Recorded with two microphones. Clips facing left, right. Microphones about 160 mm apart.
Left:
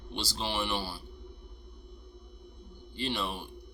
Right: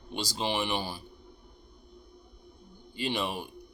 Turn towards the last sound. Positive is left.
turn(degrees=-15)  # may be behind; listen again after turning